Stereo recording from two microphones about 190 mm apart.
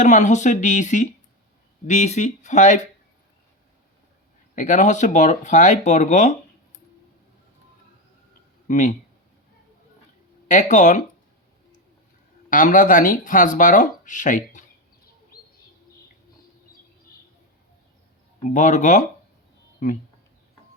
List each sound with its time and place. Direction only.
0.0 s speech: 40° left (ahead or behind)
4.5 s speech: 40° left (ahead or behind)
8.6 s speech: 40° left (ahead or behind)
10.5 s speech: 40° left (ahead or behind)
12.5 s speech: 45° left (ahead or behind)
18.4 s speech: 40° left (ahead or behind)